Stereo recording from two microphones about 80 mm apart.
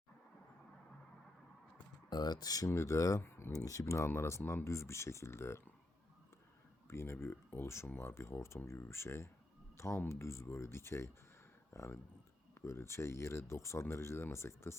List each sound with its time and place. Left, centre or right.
2.0 s speech: left
2.6 s speech: left
3.5 s speech: left
6.8 s speech: left